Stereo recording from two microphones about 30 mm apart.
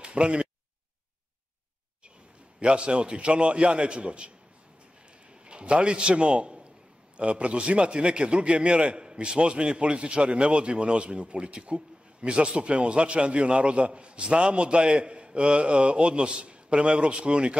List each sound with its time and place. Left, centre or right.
0.0 s a sound: right
2.6 s a man's voice: right
5.3 s a man's voice: right